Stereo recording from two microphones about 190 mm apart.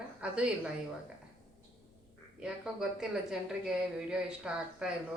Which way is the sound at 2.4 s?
5° right (ahead or behind).